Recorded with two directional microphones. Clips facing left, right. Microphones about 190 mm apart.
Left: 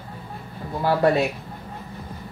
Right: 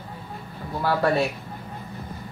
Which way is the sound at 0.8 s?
20° left (ahead or behind).